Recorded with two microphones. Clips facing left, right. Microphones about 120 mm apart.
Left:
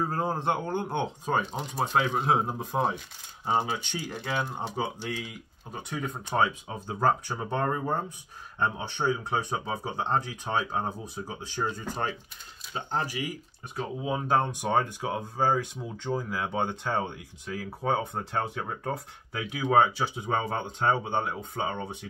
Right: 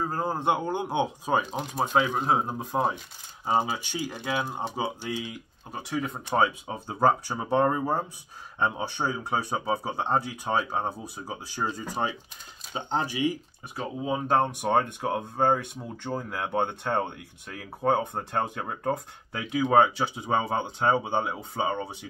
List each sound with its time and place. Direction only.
0.0 s speech: centre (ahead or behind)
12.7 s speech: 25° right (ahead or behind)
13.7 s speech: 5° right (ahead or behind)